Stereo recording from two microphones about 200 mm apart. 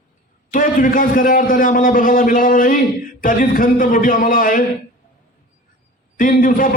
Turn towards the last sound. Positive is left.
turn(degrees=40)  # may be behind; listen again after turning